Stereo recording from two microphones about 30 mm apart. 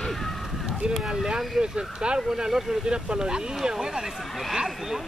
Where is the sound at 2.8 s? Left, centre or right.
Right.